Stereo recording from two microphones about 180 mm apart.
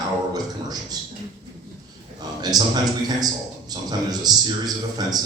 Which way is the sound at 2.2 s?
20° right (ahead or behind).